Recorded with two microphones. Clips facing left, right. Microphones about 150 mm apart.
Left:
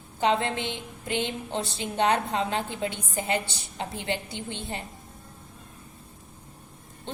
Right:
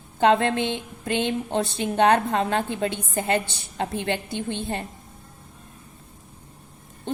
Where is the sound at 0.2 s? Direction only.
60° right (ahead or behind).